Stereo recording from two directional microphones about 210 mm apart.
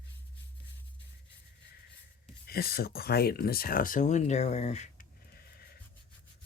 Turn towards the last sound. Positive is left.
turn(degrees=35)  # may be behind; listen again after turning